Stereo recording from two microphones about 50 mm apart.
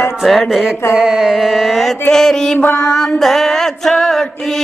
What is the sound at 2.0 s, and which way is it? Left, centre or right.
Mantra, centre.